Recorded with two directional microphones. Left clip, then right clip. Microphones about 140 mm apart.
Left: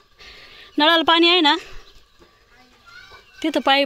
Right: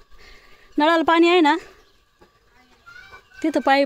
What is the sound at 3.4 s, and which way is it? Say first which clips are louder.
Speech: even; 20° right (ahead or behind).